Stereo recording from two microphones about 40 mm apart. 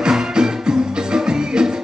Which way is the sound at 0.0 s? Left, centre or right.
Centre.